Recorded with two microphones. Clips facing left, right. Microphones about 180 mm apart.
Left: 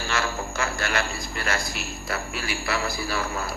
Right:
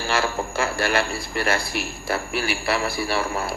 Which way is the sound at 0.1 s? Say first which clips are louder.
Right 5 dB; 30° right (ahead or behind).